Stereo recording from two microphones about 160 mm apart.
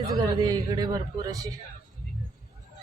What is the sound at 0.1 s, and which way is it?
A man's voice, 20° right (ahead or behind).